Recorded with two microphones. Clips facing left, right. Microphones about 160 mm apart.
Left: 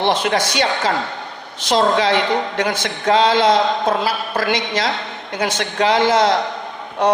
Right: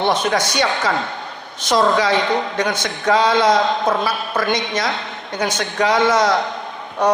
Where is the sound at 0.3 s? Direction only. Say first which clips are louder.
Even; 25° left (ahead or behind).